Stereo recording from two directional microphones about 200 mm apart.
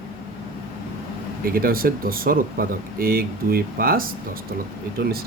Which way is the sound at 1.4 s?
45° right (ahead or behind).